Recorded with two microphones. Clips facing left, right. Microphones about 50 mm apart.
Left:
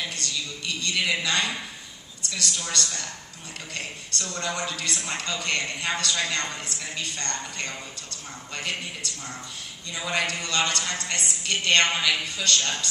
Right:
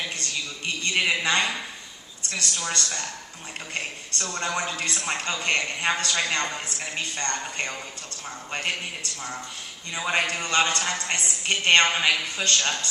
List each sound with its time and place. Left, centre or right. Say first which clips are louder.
0.1 s a sound: right 1 dB; right
2.7 s a man's voice: right 1 dB; right
4.2 s a man's voice: right 2 dB; right